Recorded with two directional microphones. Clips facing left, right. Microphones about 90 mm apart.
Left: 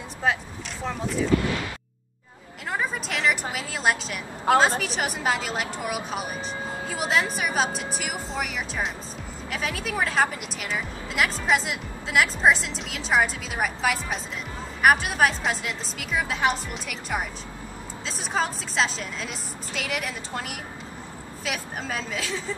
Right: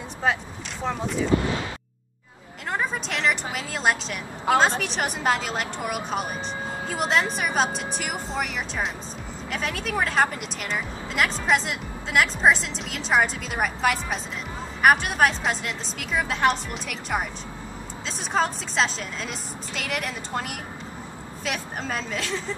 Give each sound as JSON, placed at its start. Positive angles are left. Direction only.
{"t": 0.2, "sound": "a woman's voice", "side_deg": 0}
{"t": 1.3, "sound": "speech", "side_deg": -25}
{"t": 2.7, "sound": "a woman's voice", "side_deg": 0}